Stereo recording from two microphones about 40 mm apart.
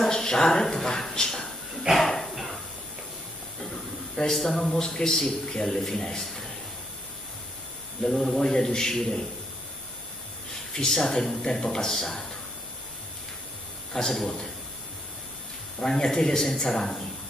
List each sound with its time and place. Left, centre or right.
0.0 s speech: centre
2.3 s dishes: centre
4.3 s a man's voice: centre
8.0 s a man's voice: centre
10.7 s a man's voice: centre
13.9 s a man's voice: centre
15.8 s a man's voice: centre